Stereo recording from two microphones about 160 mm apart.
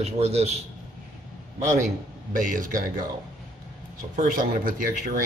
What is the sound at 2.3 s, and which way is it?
Speech, 55° right (ahead or behind).